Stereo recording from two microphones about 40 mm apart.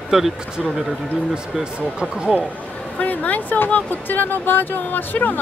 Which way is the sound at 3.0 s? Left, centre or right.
Left.